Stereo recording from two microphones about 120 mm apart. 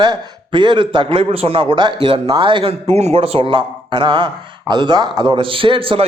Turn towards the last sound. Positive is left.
turn(degrees=-50)  # may be behind; listen again after turning